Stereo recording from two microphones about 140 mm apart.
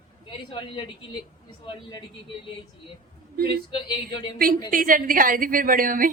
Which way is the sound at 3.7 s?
35° left (ahead or behind).